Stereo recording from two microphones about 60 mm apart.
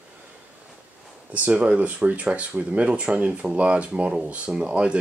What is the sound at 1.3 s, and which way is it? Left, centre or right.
Speech, right.